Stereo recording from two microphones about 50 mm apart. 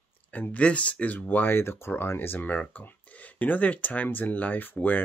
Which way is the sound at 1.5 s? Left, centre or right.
Left.